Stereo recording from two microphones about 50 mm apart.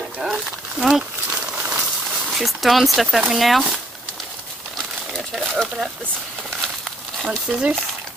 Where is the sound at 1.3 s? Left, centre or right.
Right.